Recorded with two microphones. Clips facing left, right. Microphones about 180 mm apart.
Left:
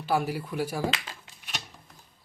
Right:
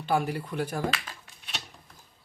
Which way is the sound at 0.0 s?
5° left (ahead or behind).